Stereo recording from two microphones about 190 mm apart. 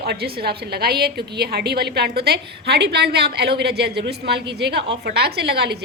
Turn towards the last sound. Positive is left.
turn(degrees=-60)  # may be behind; listen again after turning